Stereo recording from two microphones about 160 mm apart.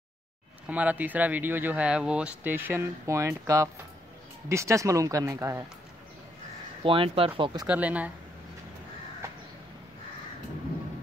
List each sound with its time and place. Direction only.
0.7 s speech: 10° right (ahead or behind)
6.8 s speech: 35° right (ahead or behind)
7.6 s speech: 10° right (ahead or behind)